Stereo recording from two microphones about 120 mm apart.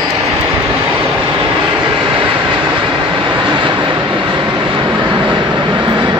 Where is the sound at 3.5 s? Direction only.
45° right (ahead or behind).